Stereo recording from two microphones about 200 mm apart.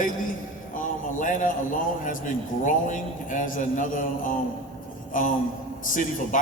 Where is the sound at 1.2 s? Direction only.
40° left (ahead or behind).